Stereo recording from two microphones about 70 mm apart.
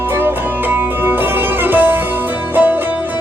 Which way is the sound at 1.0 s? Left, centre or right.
Right.